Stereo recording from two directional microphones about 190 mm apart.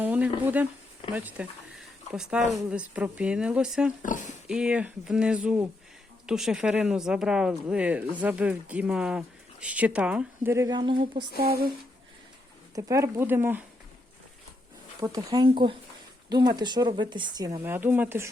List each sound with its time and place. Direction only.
0.0 s a sound: 10° right (ahead or behind)
0.4 s speech: 10° right (ahead or behind)
4.0 s speech: 40° left (ahead or behind)
4.4 s speech: 5° right (ahead or behind); by 11.1 s 25° right (ahead or behind)
11.3 s speech: 55° right (ahead or behind)
12.7 s speech: 15° right (ahead or behind)
15.0 s speech: 20° right (ahead or behind)